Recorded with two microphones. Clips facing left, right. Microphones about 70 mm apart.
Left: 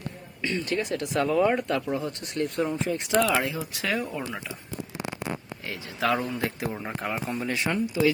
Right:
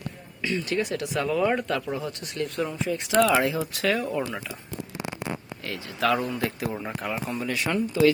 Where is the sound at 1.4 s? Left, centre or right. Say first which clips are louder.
Left 1 dB; centre.